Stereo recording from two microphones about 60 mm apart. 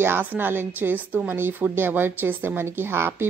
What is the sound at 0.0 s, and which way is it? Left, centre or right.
A woman's voice, right.